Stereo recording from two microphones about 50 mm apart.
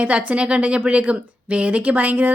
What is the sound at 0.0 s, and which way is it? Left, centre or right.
A woman's voice, right.